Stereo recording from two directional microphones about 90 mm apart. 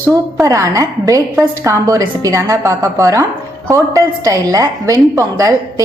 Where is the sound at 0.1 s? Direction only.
40° right (ahead or behind).